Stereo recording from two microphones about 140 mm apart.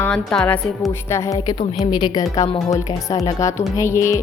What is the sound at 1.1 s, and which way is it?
A woman's voice, 20° left (ahead or behind).